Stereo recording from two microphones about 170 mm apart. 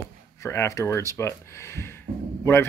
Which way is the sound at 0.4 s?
15° left (ahead or behind).